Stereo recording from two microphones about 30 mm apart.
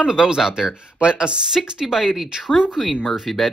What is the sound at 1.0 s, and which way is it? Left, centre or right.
Speech, right.